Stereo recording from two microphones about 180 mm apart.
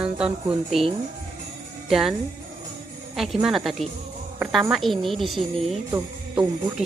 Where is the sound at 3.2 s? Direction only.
Centre (ahead or behind).